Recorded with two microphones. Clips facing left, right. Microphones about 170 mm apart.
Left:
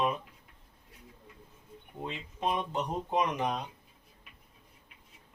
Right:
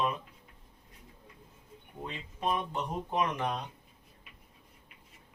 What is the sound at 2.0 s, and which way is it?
Speech, 20° left (ahead or behind).